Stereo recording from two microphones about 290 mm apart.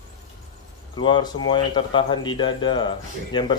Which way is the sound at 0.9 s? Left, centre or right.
Centre.